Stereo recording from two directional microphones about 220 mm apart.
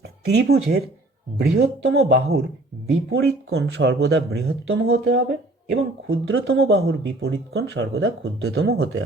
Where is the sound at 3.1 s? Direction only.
55° right (ahead or behind).